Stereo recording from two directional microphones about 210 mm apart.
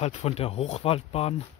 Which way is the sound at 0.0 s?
30° left (ahead or behind).